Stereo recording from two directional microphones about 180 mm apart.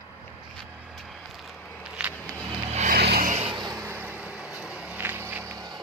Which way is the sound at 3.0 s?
60° right (ahead or behind).